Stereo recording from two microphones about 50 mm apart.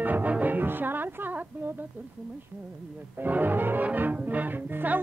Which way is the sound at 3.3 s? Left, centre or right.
Right.